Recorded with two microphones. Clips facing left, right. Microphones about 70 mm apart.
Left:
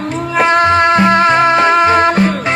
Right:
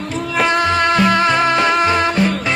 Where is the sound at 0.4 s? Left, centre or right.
Left.